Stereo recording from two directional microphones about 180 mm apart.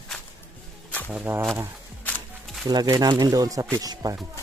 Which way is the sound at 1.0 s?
10° right (ahead or behind).